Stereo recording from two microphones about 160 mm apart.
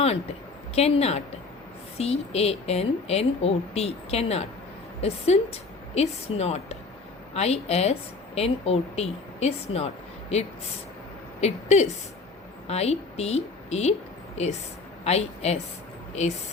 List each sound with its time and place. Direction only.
0.8 s a woman's voice: 40° left (ahead or behind)
15.0 s speech: 40° left (ahead or behind)